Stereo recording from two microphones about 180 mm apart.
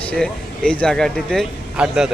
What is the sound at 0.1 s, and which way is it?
Speech, 5° left (ahead or behind).